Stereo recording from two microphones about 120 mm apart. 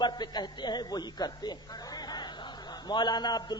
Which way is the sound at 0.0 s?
35° left (ahead or behind).